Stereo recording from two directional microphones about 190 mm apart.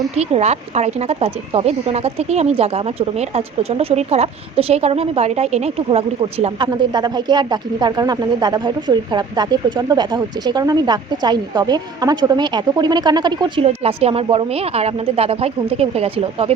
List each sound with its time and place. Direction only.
0.2 s speech: 35° right (ahead or behind)